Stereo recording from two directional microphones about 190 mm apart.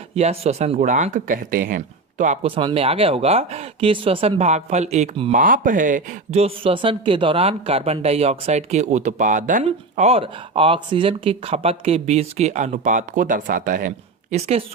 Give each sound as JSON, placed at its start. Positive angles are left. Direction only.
{"t": 0.2, "sound": "speech", "side_deg": -35}
{"t": 2.6, "sound": "speech", "side_deg": -30}
{"t": 5.4, "sound": "speech", "side_deg": -45}